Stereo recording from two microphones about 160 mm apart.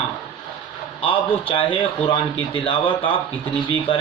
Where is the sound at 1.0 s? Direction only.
35° left (ahead or behind).